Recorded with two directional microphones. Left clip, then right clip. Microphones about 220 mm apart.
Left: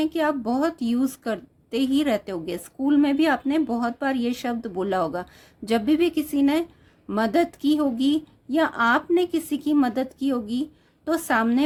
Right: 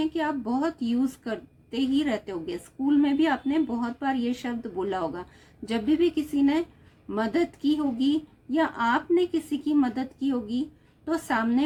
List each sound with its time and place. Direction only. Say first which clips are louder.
0.0 s a woman's voice: left 4 dB; 50° left (ahead or behind)